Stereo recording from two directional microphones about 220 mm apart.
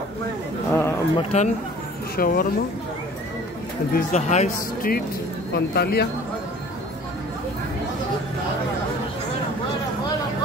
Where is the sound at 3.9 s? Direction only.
30° left (ahead or behind).